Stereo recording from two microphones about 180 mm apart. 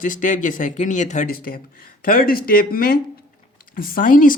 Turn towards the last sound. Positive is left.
turn(degrees=50)  # may be behind; listen again after turning